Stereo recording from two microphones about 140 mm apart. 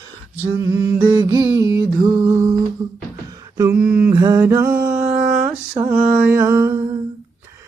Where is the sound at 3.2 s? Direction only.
25° right (ahead or behind).